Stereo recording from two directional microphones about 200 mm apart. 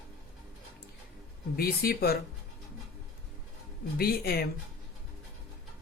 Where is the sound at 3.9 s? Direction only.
50° left (ahead or behind).